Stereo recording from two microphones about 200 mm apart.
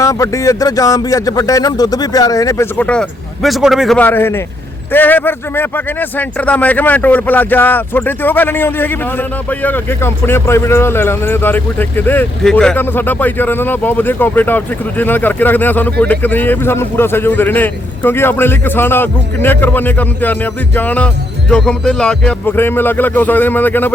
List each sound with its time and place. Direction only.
0.0 s speech: 15° left (ahead or behind)